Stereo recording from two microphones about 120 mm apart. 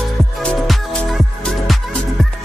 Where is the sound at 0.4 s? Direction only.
5° left (ahead or behind).